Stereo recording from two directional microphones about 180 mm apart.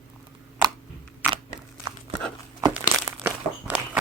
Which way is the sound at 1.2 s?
10° right (ahead or behind).